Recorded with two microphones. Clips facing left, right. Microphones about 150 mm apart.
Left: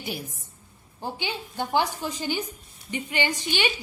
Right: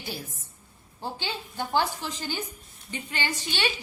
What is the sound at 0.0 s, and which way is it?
A woman's voice, 15° left (ahead or behind).